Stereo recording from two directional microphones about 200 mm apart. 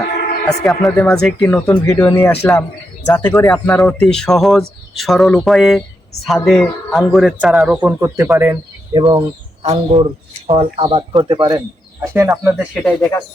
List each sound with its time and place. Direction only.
0.6 s speech: centre (ahead or behind)
9.0 s speech: 25° right (ahead or behind); by 12.8 s 10° right (ahead or behind)
12.8 s speech: 5° left (ahead or behind)